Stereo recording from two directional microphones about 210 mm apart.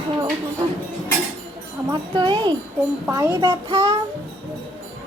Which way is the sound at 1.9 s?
20° right (ahead or behind).